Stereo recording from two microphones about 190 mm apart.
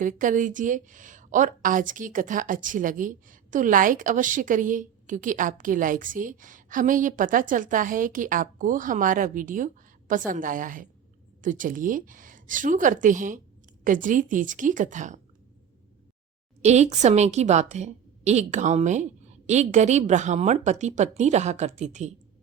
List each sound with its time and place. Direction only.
0.0 s a woman's voice: 45° right (ahead or behind)
16.6 s a woman's voice: 35° right (ahead or behind)